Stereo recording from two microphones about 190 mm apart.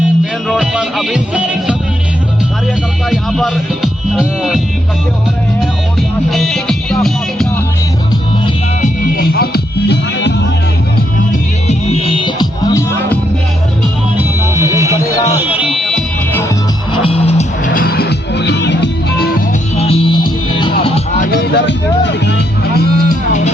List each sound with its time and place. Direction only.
0.4 s music: centre (ahead or behind)
3.1 s music: centre (ahead or behind)
8.8 s music: 50° left (ahead or behind); by 10.3 s 65° left (ahead or behind)
11.3 s music: 35° left (ahead or behind)
14.2 s music: 15° right (ahead or behind)
16.9 s music: 30° left (ahead or behind)
17.7 s music: 55° left (ahead or behind)
19.7 s music: 30° left (ahead or behind)
21.2 s music: 55° left (ahead or behind)